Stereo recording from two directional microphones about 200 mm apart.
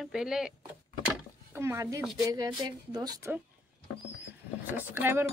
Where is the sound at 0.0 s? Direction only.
5° right (ahead or behind).